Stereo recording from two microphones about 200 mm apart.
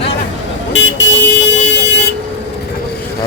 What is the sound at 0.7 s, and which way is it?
Vehicle, 65° left (ahead or behind).